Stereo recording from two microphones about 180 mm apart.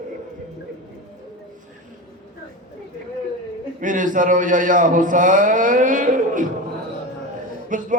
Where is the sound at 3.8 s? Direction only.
45° right (ahead or behind).